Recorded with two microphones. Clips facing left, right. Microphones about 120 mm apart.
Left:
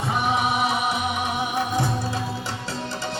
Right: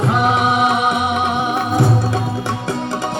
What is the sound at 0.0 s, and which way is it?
Music, 90° right.